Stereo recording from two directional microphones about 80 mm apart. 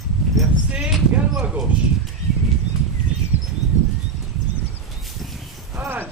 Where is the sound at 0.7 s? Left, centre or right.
Centre.